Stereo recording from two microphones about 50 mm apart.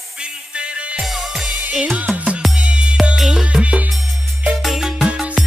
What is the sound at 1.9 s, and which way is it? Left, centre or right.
Music, right.